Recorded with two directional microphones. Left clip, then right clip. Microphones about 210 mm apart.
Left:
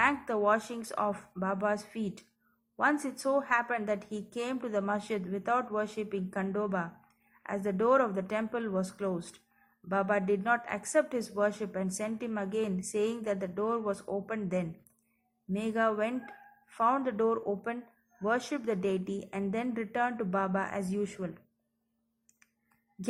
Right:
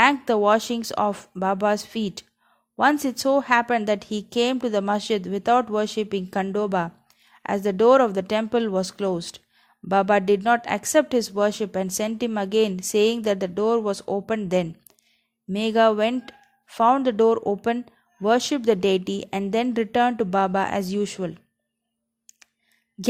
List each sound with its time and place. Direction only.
0.0 s a woman's voice: 50° right (ahead or behind)